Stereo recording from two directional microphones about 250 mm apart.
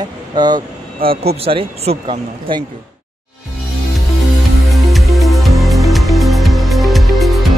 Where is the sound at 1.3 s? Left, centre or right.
Right.